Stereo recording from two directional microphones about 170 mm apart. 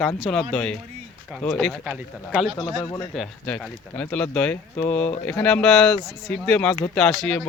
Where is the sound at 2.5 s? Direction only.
25° left (ahead or behind).